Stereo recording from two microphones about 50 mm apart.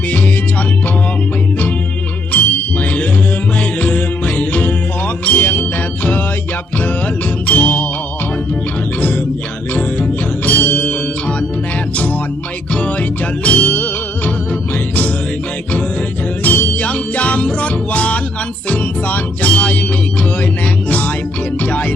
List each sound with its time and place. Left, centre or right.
2.3 s music: left
7.4 s music: left
9.7 s music: left
12.7 s music: left
16.4 s music: left
21.6 s music: left